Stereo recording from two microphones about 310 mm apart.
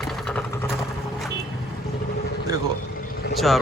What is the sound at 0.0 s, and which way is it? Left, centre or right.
Vehicle, centre.